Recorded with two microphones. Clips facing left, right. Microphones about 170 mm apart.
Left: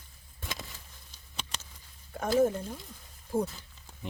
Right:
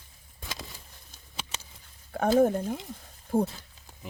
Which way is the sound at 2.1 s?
60° right (ahead or behind).